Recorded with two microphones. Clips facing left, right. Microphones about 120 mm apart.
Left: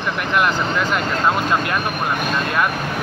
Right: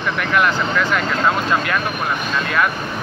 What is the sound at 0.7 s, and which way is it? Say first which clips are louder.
Speech: right 1 dB; 5° left (ahead or behind).